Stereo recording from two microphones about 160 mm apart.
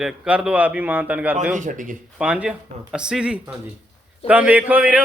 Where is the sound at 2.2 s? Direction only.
5° right (ahead or behind).